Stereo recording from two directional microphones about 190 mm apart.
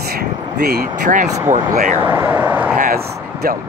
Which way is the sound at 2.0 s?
10° right (ahead or behind).